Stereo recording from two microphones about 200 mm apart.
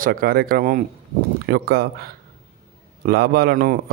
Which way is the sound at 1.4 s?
55° right (ahead or behind).